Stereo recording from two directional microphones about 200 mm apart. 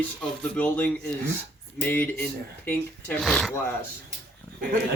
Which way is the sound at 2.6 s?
5° left (ahead or behind).